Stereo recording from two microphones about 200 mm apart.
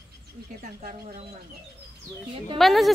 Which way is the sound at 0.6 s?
45° right (ahead or behind).